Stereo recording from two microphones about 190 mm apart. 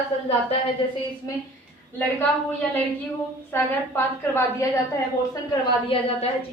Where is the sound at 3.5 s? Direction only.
15° left (ahead or behind).